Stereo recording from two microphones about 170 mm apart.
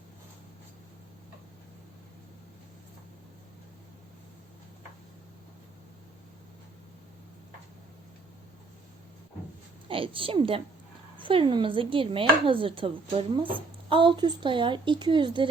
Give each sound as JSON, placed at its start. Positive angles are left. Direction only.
{"t": 9.9, "sound": "a woman's voice", "side_deg": -30}
{"t": 11.2, "sound": "chopping", "side_deg": -30}